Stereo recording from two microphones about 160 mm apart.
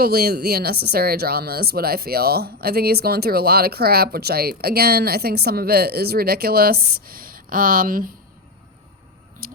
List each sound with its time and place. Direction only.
0.0 s speech: 70° right (ahead or behind)